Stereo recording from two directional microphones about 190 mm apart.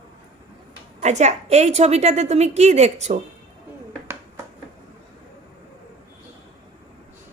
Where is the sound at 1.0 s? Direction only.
35° right (ahead or behind).